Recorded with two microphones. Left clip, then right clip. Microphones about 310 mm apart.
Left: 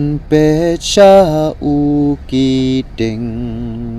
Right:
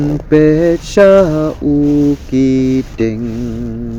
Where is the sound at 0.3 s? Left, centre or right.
Left.